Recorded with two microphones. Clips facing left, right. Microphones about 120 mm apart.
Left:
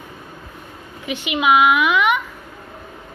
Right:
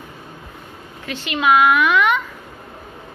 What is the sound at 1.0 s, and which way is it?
A woman's voice, 15° left (ahead or behind).